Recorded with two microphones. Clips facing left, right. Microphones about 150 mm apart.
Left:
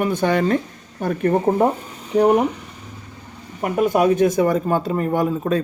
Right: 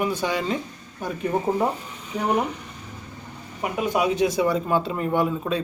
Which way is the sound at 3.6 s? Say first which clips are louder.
Left 6 dB; 50° left (ahead or behind).